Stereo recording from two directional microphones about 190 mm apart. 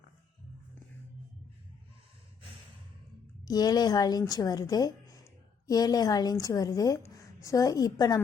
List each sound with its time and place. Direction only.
3.4 s a woman's voice: 20° left (ahead or behind)